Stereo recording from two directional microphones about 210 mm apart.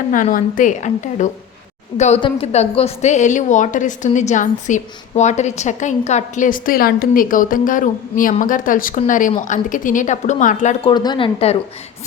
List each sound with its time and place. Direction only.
0.1 s a woman's voice: 40° left (ahead or behind)
10.9 s speech: 20° left (ahead or behind)